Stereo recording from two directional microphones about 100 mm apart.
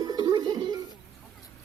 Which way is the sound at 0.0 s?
45° right (ahead or behind).